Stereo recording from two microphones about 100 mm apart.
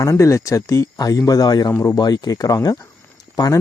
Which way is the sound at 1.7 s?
30° left (ahead or behind).